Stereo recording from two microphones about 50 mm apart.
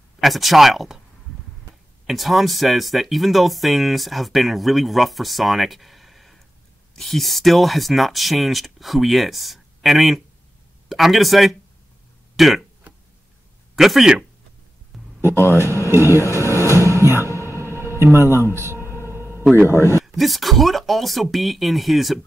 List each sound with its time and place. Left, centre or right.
0.2 s speech: centre
2.0 s speech: centre
13.7 s speech: centre
14.9 s a sound: centre
15.3 s a man's voice: left
15.9 s speech: right
16.2 s speech: left
16.6 s music: left
17.0 s music: left
17.6 s a sound: right
18.4 s music: right
19.1 s a sound: right
19.7 s speech: left
20.1 s speech: centre